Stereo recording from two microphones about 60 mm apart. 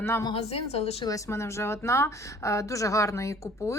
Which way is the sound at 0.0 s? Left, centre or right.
Left.